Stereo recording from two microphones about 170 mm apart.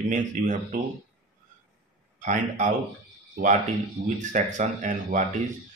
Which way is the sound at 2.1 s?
45° right (ahead or behind).